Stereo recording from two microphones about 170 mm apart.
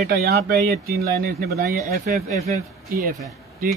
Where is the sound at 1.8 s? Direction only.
45° right (ahead or behind).